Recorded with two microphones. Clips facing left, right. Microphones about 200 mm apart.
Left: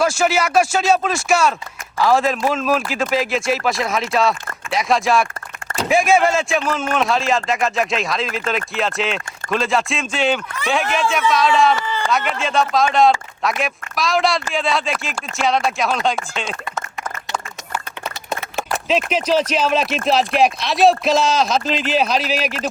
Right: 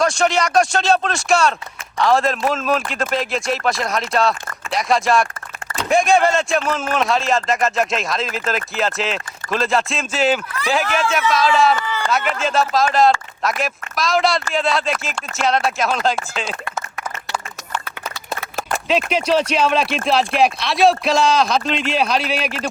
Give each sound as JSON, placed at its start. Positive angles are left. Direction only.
{"t": 0.0, "sound": "speech", "side_deg": 5}
{"t": 18.5, "sound": "speech", "side_deg": 0}